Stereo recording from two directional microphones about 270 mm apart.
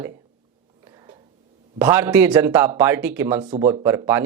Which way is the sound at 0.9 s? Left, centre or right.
Centre.